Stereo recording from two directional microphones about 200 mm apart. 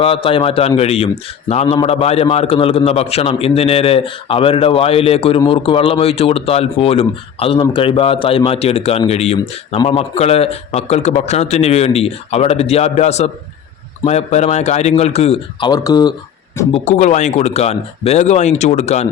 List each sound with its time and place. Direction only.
0.0 s a man's voice: 25° left (ahead or behind)
16.7 s speech: 35° left (ahead or behind)